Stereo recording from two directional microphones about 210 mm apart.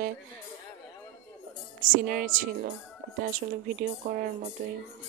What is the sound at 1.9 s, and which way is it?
Speech, 40° right (ahead or behind).